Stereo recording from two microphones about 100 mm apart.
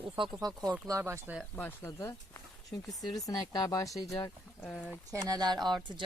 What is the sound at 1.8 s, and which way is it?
Speech, 30° left (ahead or behind).